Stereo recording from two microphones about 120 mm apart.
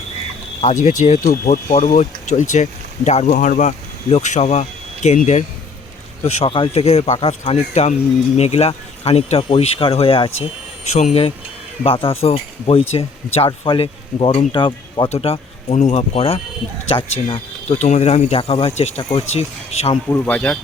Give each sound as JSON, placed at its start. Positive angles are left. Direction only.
{"t": 0.6, "sound": "speech", "side_deg": 75}
{"t": 6.2, "sound": "speech", "side_deg": 50}
{"t": 8.4, "sound": "speech", "side_deg": 60}
{"t": 10.8, "sound": "speech", "side_deg": 75}
{"t": 11.8, "sound": "speech", "side_deg": 50}
{"t": 15.1, "sound": "speech", "side_deg": 60}
{"t": 16.9, "sound": "speech", "side_deg": 45}
{"t": 17.7, "sound": "speech", "side_deg": 75}
{"t": 20.1, "sound": "speech", "side_deg": 15}